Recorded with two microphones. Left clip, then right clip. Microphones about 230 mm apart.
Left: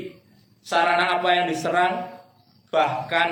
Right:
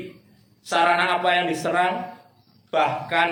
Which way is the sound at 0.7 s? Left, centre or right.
Right.